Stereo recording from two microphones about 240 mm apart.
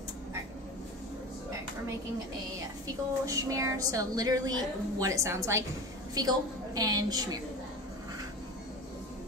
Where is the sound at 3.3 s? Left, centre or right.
Centre.